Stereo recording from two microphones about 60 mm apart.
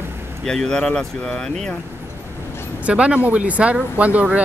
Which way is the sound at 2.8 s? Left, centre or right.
Centre.